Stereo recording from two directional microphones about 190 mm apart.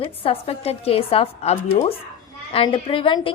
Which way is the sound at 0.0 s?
30° left (ahead or behind).